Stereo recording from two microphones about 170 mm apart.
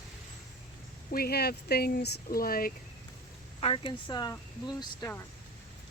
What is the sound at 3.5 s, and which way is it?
Speech, 30° left (ahead or behind).